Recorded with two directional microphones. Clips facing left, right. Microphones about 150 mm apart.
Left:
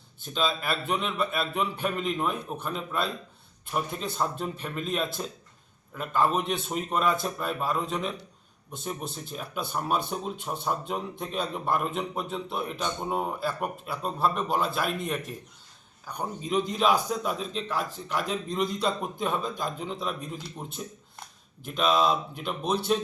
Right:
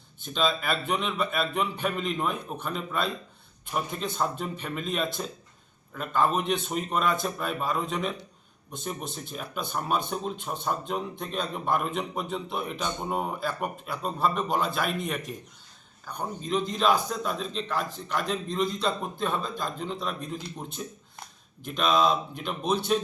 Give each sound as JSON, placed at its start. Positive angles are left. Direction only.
{"t": 0.2, "sound": "a man's voice", "side_deg": 5}